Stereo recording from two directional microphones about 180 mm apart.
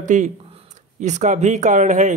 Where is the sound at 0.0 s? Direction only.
40° right (ahead or behind).